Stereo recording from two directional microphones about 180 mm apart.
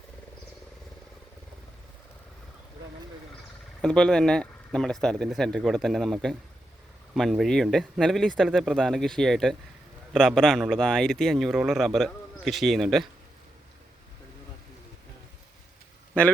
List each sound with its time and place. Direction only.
3.8 s speech: 5° left (ahead or behind)